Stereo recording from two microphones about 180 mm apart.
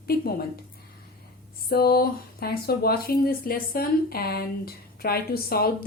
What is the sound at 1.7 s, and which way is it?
Speech, 60° left (ahead or behind).